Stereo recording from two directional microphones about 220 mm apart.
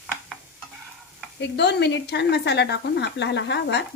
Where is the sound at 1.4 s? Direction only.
50° left (ahead or behind).